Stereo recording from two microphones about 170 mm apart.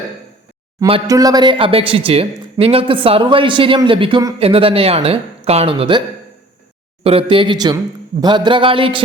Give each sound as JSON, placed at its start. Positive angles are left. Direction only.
{"t": 1.0, "sound": "speech", "side_deg": -20}
{"t": 7.0, "sound": "speech", "side_deg": -35}